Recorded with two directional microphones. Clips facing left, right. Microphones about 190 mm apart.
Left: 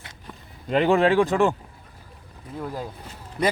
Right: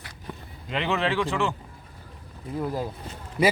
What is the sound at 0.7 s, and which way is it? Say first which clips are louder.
Speech: left 8 dB; 45° left (ahead or behind).